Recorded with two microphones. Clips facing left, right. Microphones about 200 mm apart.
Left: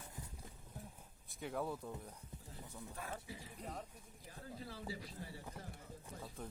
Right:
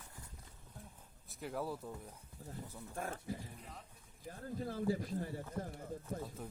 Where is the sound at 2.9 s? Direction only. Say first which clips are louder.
Right 8 dB; 50° right (ahead or behind).